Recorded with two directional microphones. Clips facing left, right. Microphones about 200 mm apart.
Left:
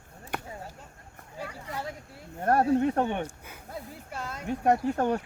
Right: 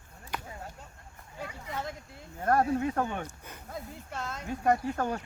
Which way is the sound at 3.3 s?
10° left (ahead or behind).